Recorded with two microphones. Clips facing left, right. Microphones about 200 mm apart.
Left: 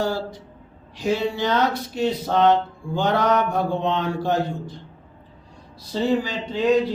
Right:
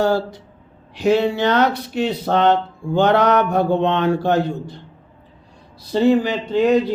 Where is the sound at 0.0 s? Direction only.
65° right (ahead or behind).